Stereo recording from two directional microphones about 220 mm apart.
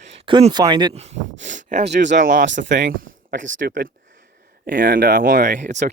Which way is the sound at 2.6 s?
35° right (ahead or behind).